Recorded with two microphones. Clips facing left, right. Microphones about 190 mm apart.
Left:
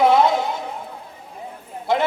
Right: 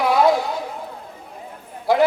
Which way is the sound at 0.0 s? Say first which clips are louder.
Left 1 dB; 25° left (ahead or behind).